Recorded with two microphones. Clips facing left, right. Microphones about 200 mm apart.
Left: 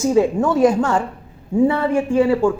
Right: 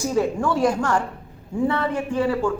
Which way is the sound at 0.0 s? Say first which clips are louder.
Left 6 dB; 25° left (ahead or behind).